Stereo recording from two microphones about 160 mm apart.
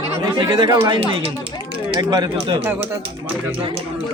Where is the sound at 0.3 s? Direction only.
30° right (ahead or behind).